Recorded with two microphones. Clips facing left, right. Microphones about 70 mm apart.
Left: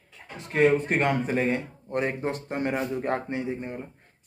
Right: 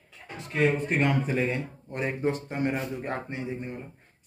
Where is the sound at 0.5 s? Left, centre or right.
Left.